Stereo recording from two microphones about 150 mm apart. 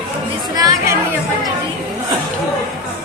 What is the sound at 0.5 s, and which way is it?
Speech, 25° right (ahead or behind).